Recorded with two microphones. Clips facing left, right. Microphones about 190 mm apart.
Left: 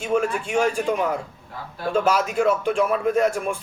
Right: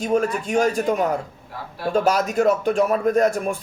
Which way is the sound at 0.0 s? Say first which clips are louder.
Right 2 dB; 40° right (ahead or behind).